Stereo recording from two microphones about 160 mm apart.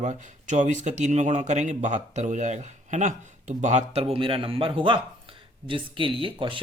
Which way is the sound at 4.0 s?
35° right (ahead or behind).